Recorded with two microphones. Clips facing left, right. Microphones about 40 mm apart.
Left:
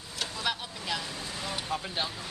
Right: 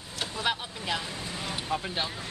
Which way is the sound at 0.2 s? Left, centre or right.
Centre.